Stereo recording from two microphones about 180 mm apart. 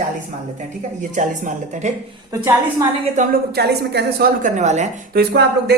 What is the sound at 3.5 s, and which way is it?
A woman's voice, 60° right (ahead or behind).